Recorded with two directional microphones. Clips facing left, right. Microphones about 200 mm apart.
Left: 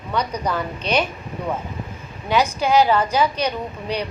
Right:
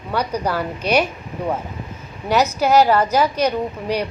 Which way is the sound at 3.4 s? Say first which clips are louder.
Right 5 dB; 10° right (ahead or behind).